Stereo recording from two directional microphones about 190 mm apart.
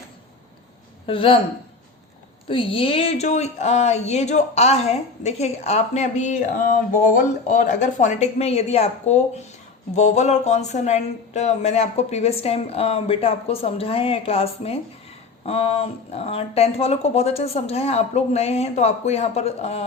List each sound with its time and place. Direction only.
1.0 s speech: 30° left (ahead or behind)
2.5 s a woman's voice: 30° left (ahead or behind)